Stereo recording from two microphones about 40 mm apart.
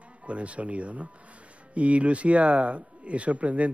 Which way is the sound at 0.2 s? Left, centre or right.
Right.